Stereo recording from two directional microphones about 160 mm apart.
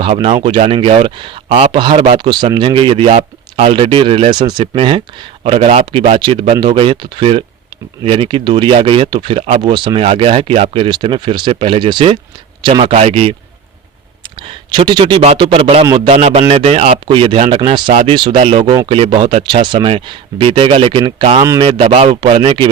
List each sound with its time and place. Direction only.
0.0 s speech: 35° right (ahead or behind)
14.3 s speech: 30° right (ahead or behind)